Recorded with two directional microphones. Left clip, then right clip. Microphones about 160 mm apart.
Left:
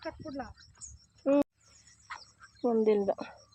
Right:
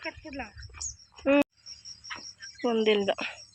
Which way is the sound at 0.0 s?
30° right (ahead or behind).